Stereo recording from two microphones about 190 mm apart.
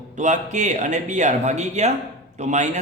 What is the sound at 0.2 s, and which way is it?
Speech, 40° right (ahead or behind).